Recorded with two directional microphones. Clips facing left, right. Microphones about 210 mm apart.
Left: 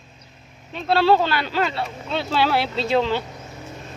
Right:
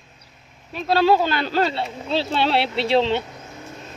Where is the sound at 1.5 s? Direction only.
40° right (ahead or behind).